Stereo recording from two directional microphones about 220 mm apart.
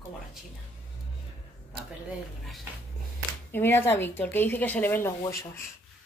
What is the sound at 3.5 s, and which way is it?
Speech, 10° left (ahead or behind).